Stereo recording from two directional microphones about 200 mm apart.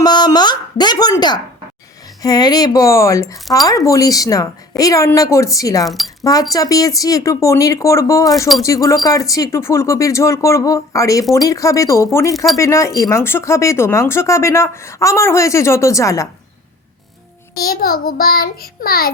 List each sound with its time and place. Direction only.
0.0 s a woman's voice: 20° left (ahead or behind)
5.8 s speech: centre (ahead or behind)
6.5 s speech: 15° left (ahead or behind)
17.5 s a child's voice: 50° left (ahead or behind)